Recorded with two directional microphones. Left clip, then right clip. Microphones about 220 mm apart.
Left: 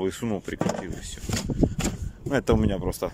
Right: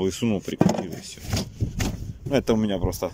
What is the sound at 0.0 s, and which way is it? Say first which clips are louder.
Speech: right 3 dB; 5° right (ahead or behind).